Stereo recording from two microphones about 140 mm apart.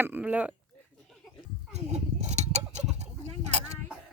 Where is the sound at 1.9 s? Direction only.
55° right (ahead or behind).